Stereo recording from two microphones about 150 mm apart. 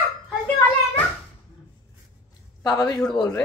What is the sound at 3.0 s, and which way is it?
Speech, 5° left (ahead or behind).